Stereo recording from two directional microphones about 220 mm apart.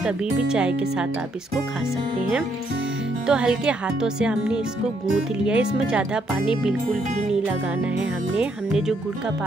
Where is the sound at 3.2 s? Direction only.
5° right (ahead or behind).